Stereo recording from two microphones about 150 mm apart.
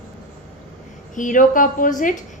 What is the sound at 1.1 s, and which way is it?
A woman's voice, 60° left (ahead or behind).